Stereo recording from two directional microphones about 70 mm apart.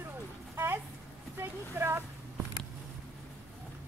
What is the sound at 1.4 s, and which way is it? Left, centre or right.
Speech, right.